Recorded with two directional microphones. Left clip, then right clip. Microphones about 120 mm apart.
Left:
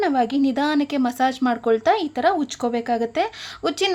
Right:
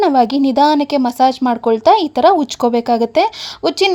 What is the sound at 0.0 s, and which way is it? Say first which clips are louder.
A woman's voice: right 8 dB; 50° right (ahead or behind).